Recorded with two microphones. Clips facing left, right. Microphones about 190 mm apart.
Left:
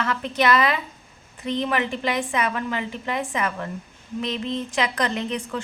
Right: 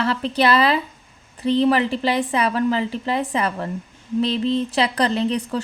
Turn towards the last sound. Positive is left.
turn(degrees=-35)  # may be behind; listen again after turning